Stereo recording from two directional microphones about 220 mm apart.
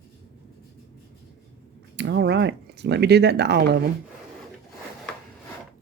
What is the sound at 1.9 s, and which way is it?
Speech, 50° right (ahead or behind).